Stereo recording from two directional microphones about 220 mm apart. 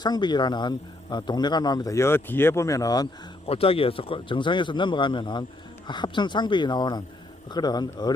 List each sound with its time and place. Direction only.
0.0 s speech: 20° left (ahead or behind)